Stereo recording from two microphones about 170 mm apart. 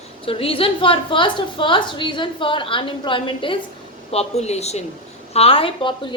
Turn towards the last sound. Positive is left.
turn(degrees=30)  # may be behind; listen again after turning